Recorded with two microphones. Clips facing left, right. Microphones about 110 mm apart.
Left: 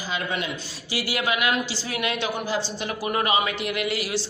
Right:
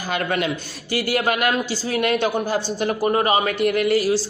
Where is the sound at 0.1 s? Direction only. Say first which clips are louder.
Right 6 dB; 60° right (ahead or behind).